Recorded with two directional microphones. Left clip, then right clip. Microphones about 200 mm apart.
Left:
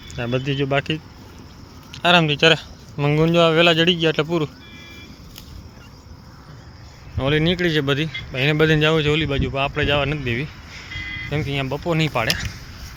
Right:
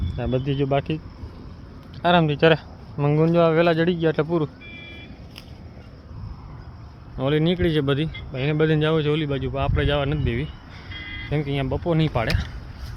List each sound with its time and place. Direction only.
0.2 s speech: 5° right (ahead or behind)
7.2 s speech: centre (ahead or behind)
8.3 s speech: 10° left (ahead or behind)
11.0 s vehicle: 20° right (ahead or behind)
11.3 s speech: 10° right (ahead or behind)